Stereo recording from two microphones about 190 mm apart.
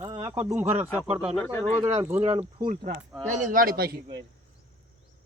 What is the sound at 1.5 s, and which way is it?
Speech, 10° left (ahead or behind).